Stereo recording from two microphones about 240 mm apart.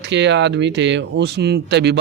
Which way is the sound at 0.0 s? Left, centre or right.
Right.